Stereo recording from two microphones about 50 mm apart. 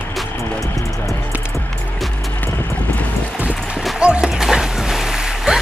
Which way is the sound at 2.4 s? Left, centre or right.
Left.